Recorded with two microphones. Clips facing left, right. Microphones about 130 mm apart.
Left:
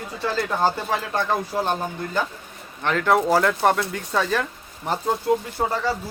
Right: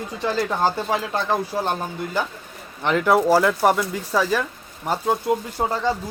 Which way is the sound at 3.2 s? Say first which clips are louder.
Right 2 dB; 5° right (ahead or behind).